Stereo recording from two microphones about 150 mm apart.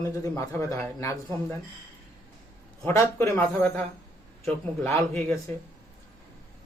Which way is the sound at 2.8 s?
15° left (ahead or behind).